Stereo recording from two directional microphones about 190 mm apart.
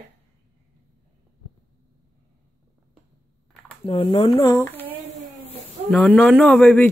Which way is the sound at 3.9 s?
30° left (ahead or behind).